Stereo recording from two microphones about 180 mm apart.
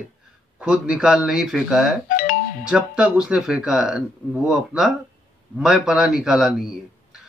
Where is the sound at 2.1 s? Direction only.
55° left (ahead or behind).